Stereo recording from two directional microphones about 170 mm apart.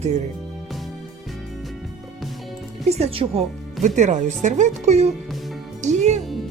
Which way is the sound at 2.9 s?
35° right (ahead or behind).